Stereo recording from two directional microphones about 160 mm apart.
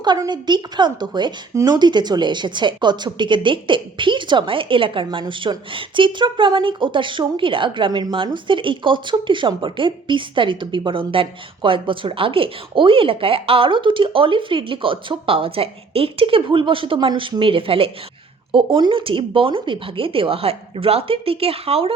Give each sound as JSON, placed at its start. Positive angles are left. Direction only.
{"t": 0.0, "sound": "a woman's voice", "side_deg": -25}